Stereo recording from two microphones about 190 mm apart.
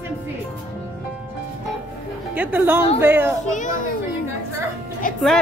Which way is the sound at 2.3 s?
10° right (ahead or behind).